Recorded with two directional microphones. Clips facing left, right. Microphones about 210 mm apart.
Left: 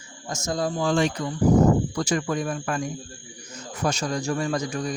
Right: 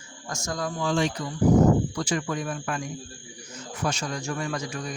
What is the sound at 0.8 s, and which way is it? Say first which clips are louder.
Speech: left 1 dB; 50° left (ahead or behind).